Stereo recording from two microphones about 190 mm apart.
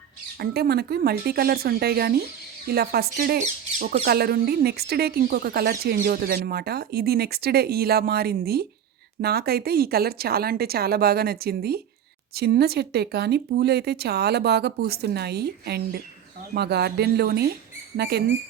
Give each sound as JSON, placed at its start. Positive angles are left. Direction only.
{"t": 0.3, "sound": "a woman's voice", "side_deg": -55}